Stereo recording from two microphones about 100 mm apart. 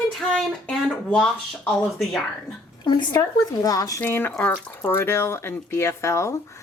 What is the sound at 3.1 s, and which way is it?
Speech, 35° left (ahead or behind).